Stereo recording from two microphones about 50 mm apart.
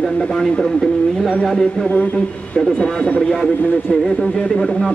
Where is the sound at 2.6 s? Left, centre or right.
Left.